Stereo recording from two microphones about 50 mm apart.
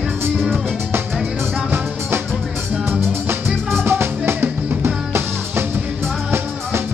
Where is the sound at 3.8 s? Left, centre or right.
Right.